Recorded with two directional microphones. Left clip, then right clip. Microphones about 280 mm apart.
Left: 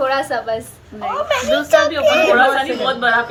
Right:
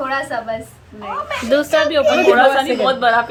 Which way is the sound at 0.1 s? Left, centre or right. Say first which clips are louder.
Left 2 dB; left.